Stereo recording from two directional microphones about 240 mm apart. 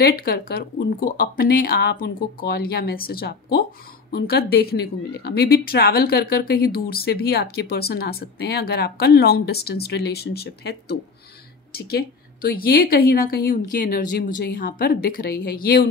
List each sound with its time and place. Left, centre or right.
0.0 s a woman's voice: left